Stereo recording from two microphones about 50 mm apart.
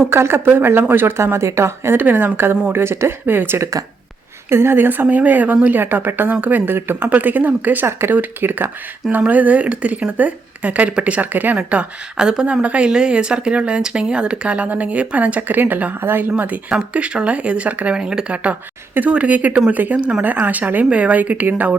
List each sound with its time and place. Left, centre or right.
0.1 s speech: right
2.0 s speech: right
2.7 s speech: right
5.0 s speech: right
6.3 s speech: right
6.7 s speech: right
7.1 s speech: right
9.1 s speech: right
11.5 s speech: right
16.4 s speech: right
17.9 s speech: centre
19.1 s speech: right
20.0 s speech: right
20.2 s speech: right